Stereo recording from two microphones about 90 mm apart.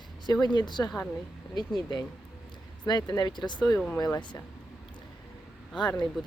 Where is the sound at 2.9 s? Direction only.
55° left (ahead or behind).